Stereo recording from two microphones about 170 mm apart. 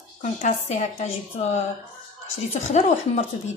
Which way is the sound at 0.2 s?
45° left (ahead or behind).